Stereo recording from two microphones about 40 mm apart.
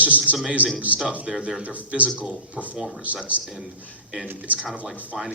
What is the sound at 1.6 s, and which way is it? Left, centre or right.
Speech, right.